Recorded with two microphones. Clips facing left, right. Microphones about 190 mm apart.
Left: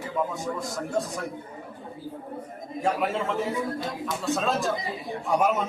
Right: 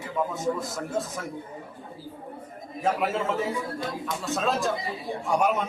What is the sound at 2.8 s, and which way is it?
Speech, centre (ahead or behind).